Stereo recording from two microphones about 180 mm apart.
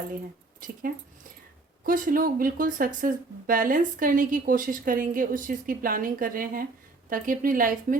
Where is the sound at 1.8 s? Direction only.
50° right (ahead or behind).